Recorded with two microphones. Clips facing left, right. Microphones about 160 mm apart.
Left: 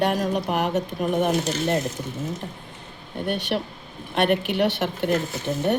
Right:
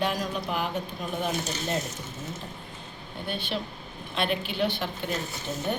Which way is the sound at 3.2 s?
70° left (ahead or behind).